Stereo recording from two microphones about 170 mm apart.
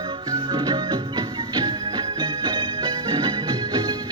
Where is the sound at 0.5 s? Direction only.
25° right (ahead or behind).